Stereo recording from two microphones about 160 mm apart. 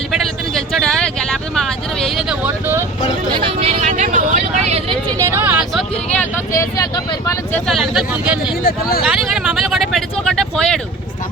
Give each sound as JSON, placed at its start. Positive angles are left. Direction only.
{"t": 0.7, "sound": "vehicle", "side_deg": 5}
{"t": 3.3, "sound": "vehicle", "side_deg": -40}
{"t": 5.2, "sound": "a sound", "side_deg": -15}
{"t": 6.6, "sound": "speech", "side_deg": 25}
{"t": 7.7, "sound": "speech", "side_deg": 0}
{"t": 9.0, "sound": "vehicle", "side_deg": -5}